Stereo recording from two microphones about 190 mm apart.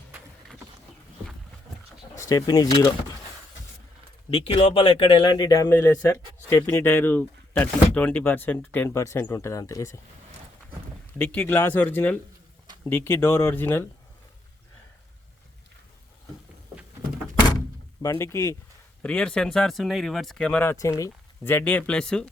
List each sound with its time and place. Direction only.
2.1 s speech: 15° left (ahead or behind)
4.4 s speech: 30° left (ahead or behind)
11.2 s speech: 10° left (ahead or behind)
18.0 s speech: 15° left (ahead or behind)